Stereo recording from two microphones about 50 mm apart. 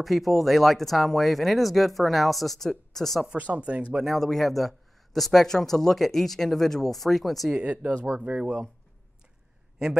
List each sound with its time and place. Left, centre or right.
0.0 s a man's voice: centre
3.3 s speech: right
4.0 s a man's voice: centre
7.5 s speech: right